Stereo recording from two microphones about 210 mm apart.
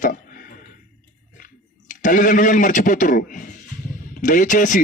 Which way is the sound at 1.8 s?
40° left (ahead or behind).